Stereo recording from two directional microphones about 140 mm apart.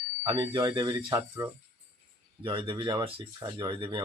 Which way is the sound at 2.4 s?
35° right (ahead or behind).